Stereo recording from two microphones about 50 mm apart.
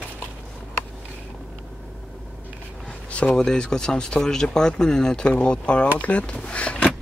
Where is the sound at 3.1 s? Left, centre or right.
Left.